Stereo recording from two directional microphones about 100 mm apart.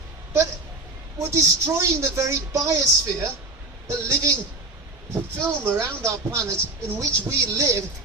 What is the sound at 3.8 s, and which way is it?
Speech, 30° right (ahead or behind).